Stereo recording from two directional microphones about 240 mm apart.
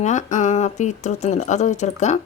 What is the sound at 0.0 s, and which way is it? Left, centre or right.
Speech, left.